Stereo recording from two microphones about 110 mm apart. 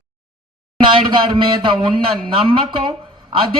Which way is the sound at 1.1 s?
45° right (ahead or behind).